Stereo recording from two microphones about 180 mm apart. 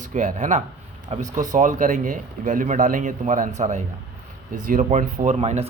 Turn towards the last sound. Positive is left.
turn(degrees=-35)  # may be behind; listen again after turning